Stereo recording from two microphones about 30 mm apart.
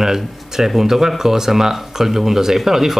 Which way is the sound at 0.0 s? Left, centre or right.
Centre.